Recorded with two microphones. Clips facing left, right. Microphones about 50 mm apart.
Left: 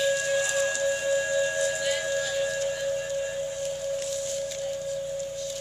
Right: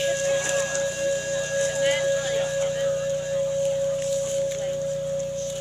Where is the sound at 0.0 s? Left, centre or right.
Right.